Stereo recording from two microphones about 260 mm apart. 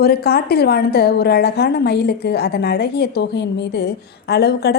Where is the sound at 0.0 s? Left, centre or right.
Left.